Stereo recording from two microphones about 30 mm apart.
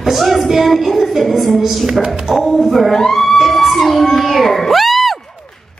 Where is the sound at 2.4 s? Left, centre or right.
Centre.